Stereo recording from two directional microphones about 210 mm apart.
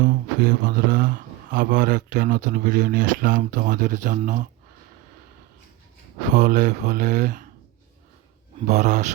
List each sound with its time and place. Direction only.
0.0 s speech: 40° right (ahead or behind)
6.3 s speech: 40° right (ahead or behind)
8.6 s speech: 35° right (ahead or behind)